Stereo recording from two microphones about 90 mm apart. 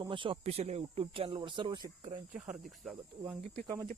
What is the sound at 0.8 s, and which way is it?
Speech, 90° right.